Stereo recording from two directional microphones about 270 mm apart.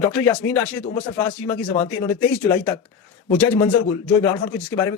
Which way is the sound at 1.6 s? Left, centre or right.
Centre.